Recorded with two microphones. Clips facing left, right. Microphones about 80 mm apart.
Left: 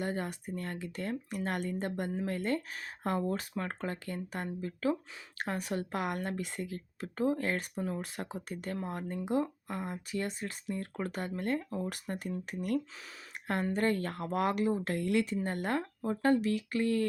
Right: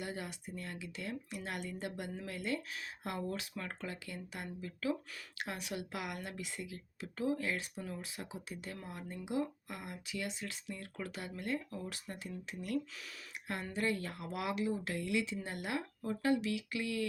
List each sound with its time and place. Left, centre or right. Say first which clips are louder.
0.0 s speech: left 7 dB; left